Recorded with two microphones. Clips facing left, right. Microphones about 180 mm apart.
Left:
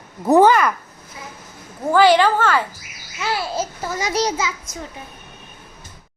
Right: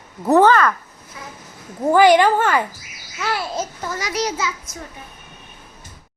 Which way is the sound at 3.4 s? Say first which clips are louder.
Left 1 dB; centre (ahead or behind).